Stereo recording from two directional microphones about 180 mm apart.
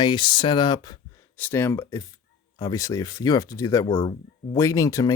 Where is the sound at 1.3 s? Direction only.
10° left (ahead or behind).